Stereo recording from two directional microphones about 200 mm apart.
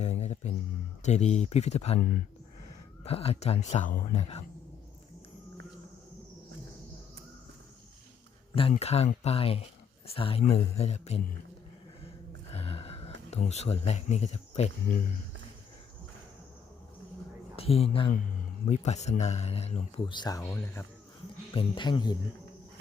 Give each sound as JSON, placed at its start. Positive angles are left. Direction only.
{"t": 0.0, "sound": "a sound", "side_deg": 35}
{"t": 1.0, "sound": "speech", "side_deg": 35}
{"t": 3.0, "sound": "speech", "side_deg": 30}
{"t": 8.7, "sound": "speech", "side_deg": 30}
{"t": 12.5, "sound": "gasp", "side_deg": 30}
{"t": 13.3, "sound": "speech", "side_deg": 35}
{"t": 17.6, "sound": "speech", "side_deg": 30}
{"t": 21.5, "sound": "speech", "side_deg": 25}